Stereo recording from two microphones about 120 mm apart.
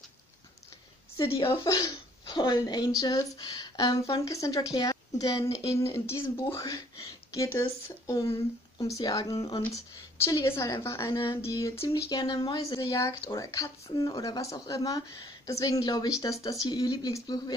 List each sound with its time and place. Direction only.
1.7 s a woman's voice: 30° left (ahead or behind)
12.1 s a woman's voice: 35° left (ahead or behind)